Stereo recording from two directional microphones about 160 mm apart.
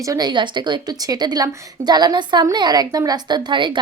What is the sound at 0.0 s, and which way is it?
A woman's voice, 25° right (ahead or behind).